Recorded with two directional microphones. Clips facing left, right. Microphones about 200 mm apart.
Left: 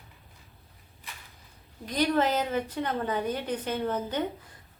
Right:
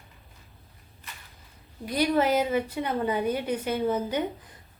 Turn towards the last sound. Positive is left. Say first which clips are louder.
# right 3 dB
turn(degrees=-10)  # may be behind; listen again after turning